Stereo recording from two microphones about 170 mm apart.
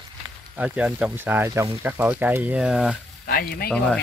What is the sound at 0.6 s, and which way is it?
Speech, 10° right (ahead or behind).